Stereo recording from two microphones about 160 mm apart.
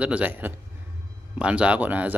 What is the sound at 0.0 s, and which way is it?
Speech, 10° right (ahead or behind).